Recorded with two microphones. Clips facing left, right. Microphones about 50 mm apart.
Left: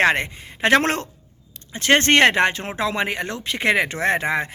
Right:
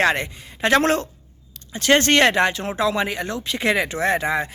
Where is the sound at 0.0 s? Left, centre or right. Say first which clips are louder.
Left 1 dB; left.